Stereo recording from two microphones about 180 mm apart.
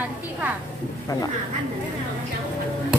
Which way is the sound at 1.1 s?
20° left (ahead or behind).